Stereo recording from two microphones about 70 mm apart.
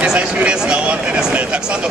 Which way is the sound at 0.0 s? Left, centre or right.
Centre.